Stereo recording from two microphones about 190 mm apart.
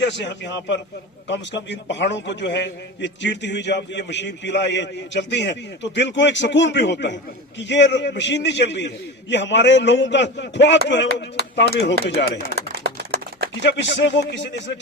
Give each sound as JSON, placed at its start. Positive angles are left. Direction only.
{"t": 0.0, "sound": "a man's voice", "side_deg": 70}
{"t": 12.5, "sound": "a sound", "side_deg": -55}
{"t": 13.6, "sound": "a man's voice", "side_deg": 70}